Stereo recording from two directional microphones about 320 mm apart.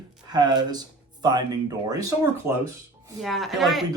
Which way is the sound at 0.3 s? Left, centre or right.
Centre.